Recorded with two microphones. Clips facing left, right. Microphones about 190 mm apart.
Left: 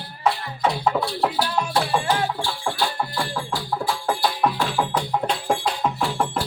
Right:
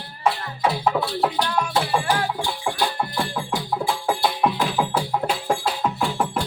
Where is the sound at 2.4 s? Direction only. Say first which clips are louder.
Right 1 dB; 20° right (ahead or behind).